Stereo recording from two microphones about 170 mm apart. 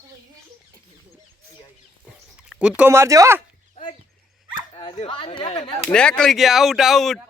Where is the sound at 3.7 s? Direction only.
35° left (ahead or behind).